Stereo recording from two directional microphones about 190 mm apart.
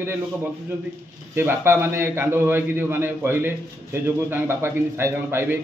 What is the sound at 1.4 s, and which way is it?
A man's voice, 10° right (ahead or behind).